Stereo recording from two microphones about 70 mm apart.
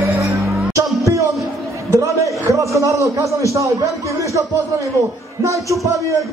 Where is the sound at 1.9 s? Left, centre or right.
Right.